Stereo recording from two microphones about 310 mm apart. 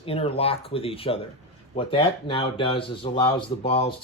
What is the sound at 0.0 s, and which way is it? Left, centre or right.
Speech, centre.